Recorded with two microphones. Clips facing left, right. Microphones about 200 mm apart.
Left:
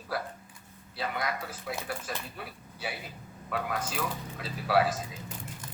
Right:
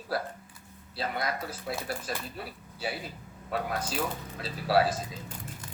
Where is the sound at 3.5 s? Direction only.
35° right (ahead or behind).